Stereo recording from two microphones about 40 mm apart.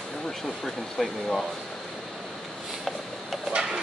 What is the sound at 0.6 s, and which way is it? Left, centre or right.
Speech, centre.